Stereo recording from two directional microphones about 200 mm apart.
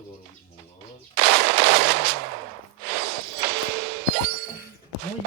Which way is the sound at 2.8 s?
55° right (ahead or behind).